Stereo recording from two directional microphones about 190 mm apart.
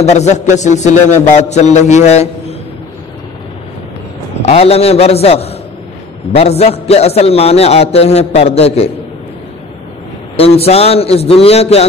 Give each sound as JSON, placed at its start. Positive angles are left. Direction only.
{"t": 0.0, "sound": "a man's voice", "side_deg": 35}
{"t": 4.4, "sound": "a man's voice", "side_deg": 35}
{"t": 10.3, "sound": "a man's voice", "side_deg": 30}